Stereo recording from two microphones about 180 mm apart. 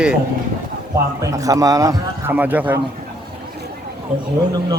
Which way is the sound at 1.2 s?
20° right (ahead or behind).